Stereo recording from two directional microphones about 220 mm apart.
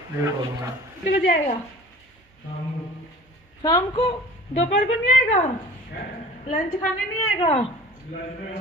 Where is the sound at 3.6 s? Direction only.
20° left (ahead or behind).